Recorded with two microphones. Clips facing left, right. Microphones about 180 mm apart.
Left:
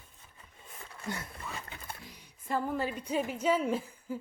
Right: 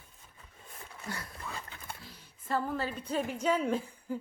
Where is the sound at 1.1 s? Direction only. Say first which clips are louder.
Left 3 dB; 25° left (ahead or behind).